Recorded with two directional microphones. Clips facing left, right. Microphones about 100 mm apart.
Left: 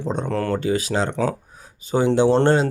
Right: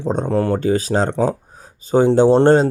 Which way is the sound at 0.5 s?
35° right (ahead or behind).